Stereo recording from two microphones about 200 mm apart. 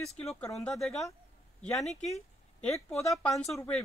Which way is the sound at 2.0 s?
Centre (ahead or behind).